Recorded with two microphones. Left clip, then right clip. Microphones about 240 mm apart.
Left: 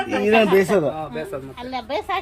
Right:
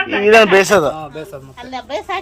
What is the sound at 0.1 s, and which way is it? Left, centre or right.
Speech, centre.